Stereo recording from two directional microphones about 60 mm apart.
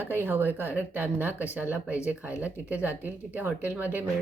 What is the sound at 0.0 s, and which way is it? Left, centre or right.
Speech, right.